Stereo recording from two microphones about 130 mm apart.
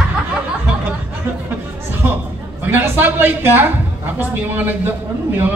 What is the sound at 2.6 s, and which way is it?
A woman's voice, 15° right (ahead or behind).